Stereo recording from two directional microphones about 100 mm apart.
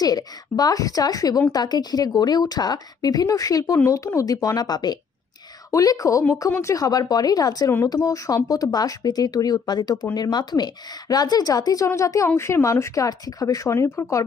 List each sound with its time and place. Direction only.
0.0 s a woman's voice: 40° left (ahead or behind)